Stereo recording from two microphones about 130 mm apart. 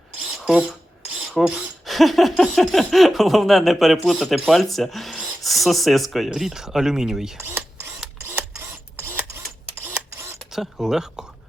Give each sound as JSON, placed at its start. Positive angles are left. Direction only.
{"t": 0.4, "sound": "speech", "side_deg": -5}
{"t": 7.3, "sound": "mechanisms", "side_deg": -15}
{"t": 8.3, "sound": "a sound", "side_deg": -15}
{"t": 9.8, "sound": "camera", "side_deg": -20}
{"t": 10.5, "sound": "speech", "side_deg": -5}